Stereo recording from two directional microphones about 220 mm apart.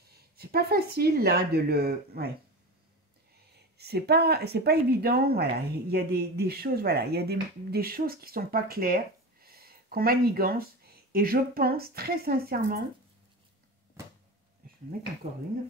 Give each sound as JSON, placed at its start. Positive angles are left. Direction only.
{"t": 0.4, "sound": "speech", "side_deg": -45}
{"t": 3.7, "sound": "speech", "side_deg": -45}